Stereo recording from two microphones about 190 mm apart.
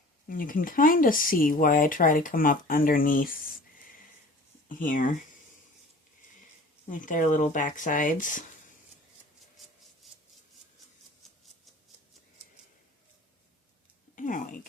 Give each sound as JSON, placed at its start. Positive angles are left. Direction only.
{"t": 0.3, "sound": "speech", "side_deg": 45}
{"t": 4.8, "sound": "speech", "side_deg": 45}
{"t": 6.8, "sound": "speech", "side_deg": 45}
{"t": 9.6, "sound": "a sound", "side_deg": 0}
{"t": 11.2, "sound": "scissors", "side_deg": 0}
{"t": 14.2, "sound": "speech", "side_deg": 45}